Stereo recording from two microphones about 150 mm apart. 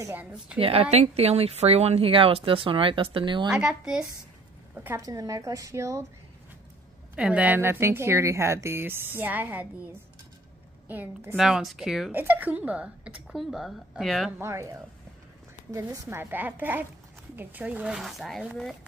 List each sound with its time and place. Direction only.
0.0 s speech: 10° right (ahead or behind)
0.6 s a woman's voice: 40° right (ahead or behind)
3.4 s a woman's voice: 5° right (ahead or behind)
4.8 s a woman's voice: 20° right (ahead or behind)
7.2 s speech: 10° right (ahead or behind)
10.9 s a woman's voice: 10° right (ahead or behind)
14.4 s speech: 20° right (ahead or behind)
15.7 s speech: 20° right (ahead or behind); by 18.5 s centre (ahead or behind)